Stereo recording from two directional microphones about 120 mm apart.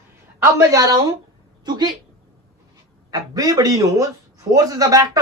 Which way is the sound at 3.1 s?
35° right (ahead or behind).